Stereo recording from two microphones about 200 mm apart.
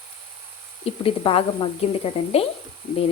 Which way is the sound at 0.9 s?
30° left (ahead or behind).